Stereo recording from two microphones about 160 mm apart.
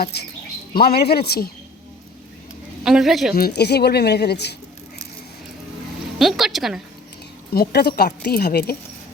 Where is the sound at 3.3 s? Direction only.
85° left.